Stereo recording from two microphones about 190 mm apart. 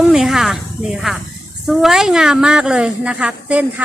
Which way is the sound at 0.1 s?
Centre (ahead or behind).